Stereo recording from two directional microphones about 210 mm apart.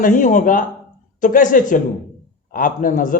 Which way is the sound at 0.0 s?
40° left (ahead or behind).